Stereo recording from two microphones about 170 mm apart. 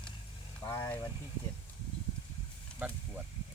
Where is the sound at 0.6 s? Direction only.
15° left (ahead or behind).